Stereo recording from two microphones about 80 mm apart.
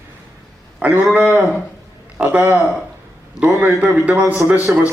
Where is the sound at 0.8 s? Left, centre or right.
Centre.